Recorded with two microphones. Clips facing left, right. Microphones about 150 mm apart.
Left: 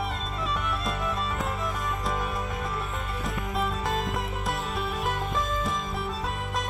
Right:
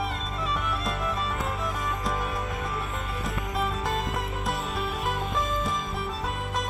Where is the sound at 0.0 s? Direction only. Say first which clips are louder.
Even; centre (ahead or behind).